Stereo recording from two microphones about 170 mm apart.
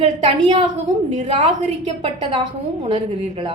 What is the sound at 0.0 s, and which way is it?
A woman's voice, 35° right (ahead or behind).